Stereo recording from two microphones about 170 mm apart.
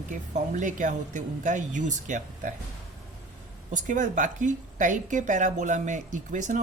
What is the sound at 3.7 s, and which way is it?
A woman's voice, 50° right (ahead or behind).